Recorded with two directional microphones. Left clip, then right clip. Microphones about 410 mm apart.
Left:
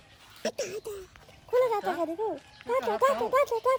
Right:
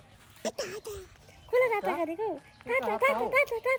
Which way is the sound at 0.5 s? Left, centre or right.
Centre.